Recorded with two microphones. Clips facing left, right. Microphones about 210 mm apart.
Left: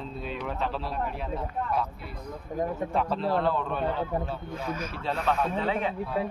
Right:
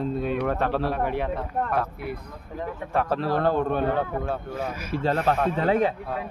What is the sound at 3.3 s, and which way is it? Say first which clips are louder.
Speech: right 7 dB; 50° right (ahead or behind).